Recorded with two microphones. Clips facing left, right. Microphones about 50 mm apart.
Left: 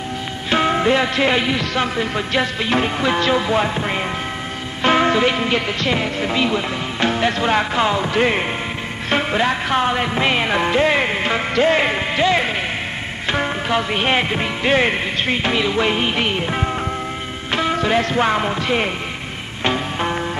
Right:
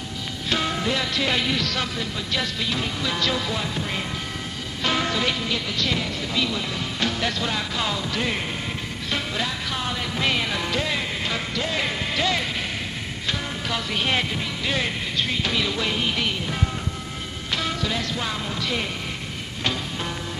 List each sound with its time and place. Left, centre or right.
0.5 s music: left
12.2 s speech: left
13.3 s music: left